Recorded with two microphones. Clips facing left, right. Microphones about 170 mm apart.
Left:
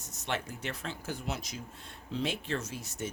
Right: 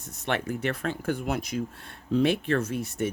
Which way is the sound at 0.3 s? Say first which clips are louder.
Right 8 dB; 60° right (ahead or behind).